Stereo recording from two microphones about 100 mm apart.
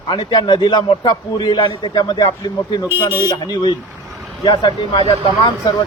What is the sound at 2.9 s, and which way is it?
Speech, 20° right (ahead or behind).